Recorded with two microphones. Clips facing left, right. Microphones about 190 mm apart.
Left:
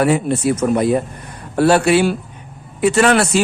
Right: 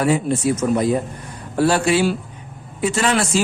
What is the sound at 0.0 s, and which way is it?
A man's voice, 65° left (ahead or behind).